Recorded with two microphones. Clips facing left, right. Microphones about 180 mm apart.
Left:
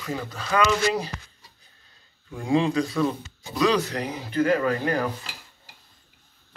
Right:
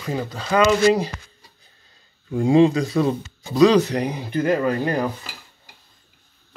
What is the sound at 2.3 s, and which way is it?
Speech, 35° right (ahead or behind).